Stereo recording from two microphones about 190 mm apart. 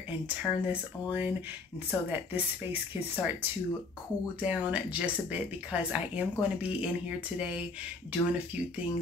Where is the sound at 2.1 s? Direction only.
10° right (ahead or behind).